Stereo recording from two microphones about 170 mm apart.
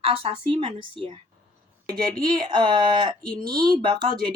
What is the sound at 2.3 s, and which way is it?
Speech, 25° right (ahead or behind).